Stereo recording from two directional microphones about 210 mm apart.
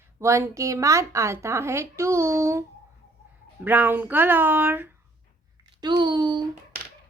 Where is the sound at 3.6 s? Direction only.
10° right (ahead or behind).